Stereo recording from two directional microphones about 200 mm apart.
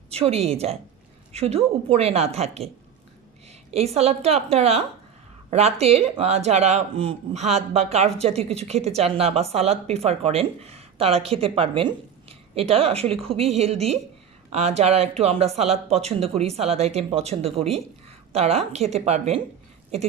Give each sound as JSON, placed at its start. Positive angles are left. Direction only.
{"t": 0.1, "sound": "a woman's voice", "side_deg": -30}
{"t": 3.7, "sound": "a woman's voice", "side_deg": -30}